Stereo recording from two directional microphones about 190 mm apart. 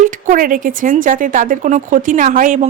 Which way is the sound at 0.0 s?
45° right (ahead or behind).